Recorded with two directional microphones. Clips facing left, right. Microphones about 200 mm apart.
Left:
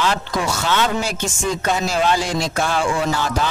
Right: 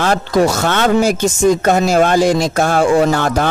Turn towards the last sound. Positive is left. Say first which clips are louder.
# right 6 dB
turn(degrees=-55)  # may be behind; listen again after turning